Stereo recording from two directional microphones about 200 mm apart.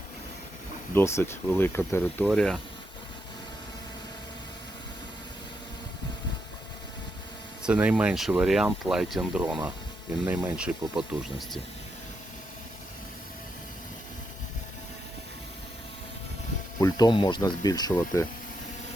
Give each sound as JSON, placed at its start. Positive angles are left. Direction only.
{"t": 0.9, "sound": "speech", "side_deg": 10}
{"t": 7.6, "sound": "speech", "side_deg": -5}
{"t": 16.8, "sound": "speech", "side_deg": 20}